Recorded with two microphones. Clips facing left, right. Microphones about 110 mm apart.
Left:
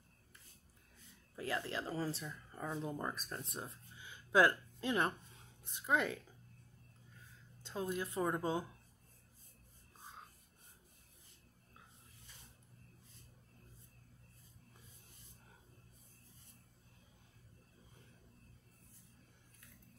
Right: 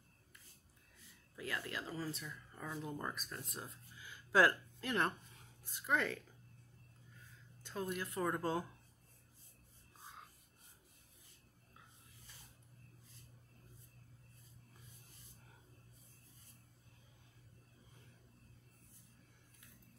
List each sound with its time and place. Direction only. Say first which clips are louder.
1.3 s a woman's voice: left 4 dB; 30° left (ahead or behind)
7.6 s a woman's voice: left 2 dB; 20° left (ahead or behind)